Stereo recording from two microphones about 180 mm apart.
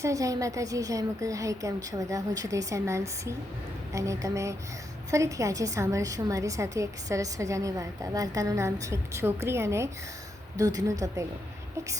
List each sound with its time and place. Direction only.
0.0 s a woman's voice: 20° right (ahead or behind)